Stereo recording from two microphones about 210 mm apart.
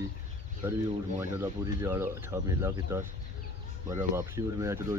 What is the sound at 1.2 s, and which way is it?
Speech, 10° right (ahead or behind).